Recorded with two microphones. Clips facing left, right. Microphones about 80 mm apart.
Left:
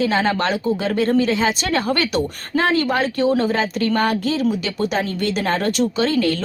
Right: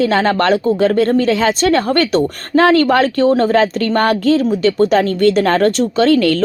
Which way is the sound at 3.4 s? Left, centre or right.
Right.